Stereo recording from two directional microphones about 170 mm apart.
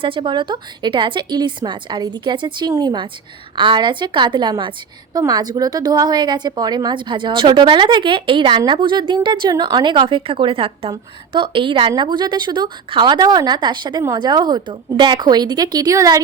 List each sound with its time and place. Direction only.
0.0 s a woman's voice: 30° right (ahead or behind)